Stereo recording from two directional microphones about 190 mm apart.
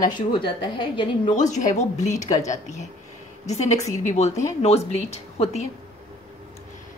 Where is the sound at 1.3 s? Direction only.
40° left (ahead or behind).